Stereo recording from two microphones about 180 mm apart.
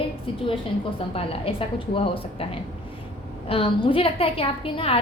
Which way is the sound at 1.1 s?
30° left (ahead or behind).